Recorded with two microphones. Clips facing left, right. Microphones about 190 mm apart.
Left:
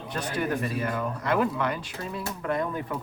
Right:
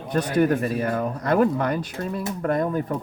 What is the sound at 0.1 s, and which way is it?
Speech, 40° right (ahead or behind).